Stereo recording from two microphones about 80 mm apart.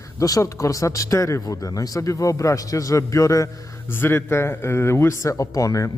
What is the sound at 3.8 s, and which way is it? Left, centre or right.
Speech, left.